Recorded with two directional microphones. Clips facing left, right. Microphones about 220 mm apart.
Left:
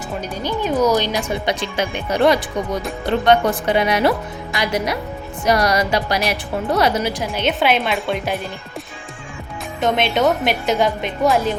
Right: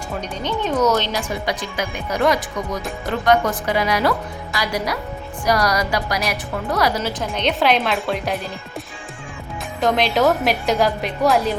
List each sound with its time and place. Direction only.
0.2 s speech: 10° left (ahead or behind); by 6.9 s 30° left (ahead or behind)
7.3 s a woman's voice: 5° left (ahead or behind)
9.8 s a woman's voice: centre (ahead or behind)